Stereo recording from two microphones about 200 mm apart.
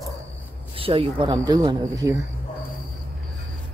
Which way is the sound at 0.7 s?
25° right (ahead or behind).